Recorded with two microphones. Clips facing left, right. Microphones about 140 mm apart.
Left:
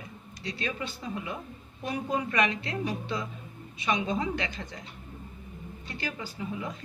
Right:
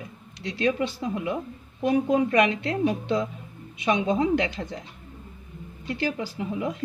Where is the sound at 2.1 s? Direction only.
60° right (ahead or behind).